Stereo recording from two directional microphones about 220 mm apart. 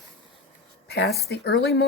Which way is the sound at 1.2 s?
45° left (ahead or behind).